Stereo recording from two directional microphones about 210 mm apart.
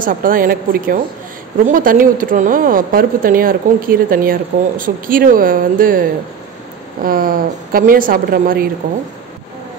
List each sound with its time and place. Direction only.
0.0 s a woman's voice: 40° right (ahead or behind)